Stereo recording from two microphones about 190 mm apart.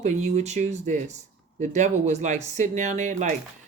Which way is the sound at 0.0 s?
35° right (ahead or behind).